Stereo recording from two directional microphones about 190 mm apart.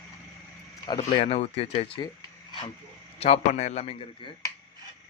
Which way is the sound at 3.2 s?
35° left (ahead or behind).